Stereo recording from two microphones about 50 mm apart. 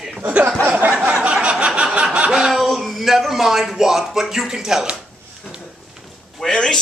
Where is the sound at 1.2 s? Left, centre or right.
Right.